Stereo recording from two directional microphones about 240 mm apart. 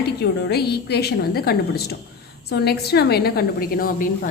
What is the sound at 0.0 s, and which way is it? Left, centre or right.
A woman's voice, left.